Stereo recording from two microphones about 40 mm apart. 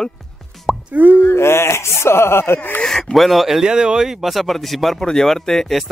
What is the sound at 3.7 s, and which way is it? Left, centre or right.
Speech, centre.